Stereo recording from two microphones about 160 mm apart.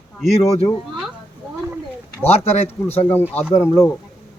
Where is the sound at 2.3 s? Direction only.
40° left (ahead or behind).